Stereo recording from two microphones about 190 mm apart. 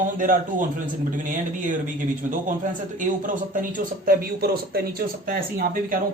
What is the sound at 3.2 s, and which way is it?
Speech, 45° right (ahead or behind).